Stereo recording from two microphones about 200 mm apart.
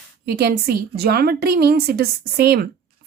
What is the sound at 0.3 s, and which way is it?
A woman's voice, 50° right (ahead or behind).